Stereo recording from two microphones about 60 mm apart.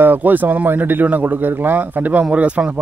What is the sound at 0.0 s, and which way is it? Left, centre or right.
A man's voice, right.